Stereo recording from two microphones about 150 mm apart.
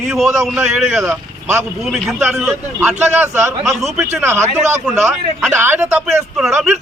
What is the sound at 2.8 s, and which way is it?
Speech, 15° right (ahead or behind).